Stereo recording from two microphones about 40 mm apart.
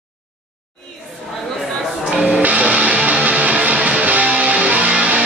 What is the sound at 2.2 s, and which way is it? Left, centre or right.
Music, right.